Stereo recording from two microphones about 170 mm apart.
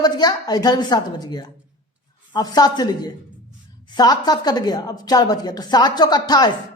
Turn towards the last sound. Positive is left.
turn(degrees=25)  # may be behind; listen again after turning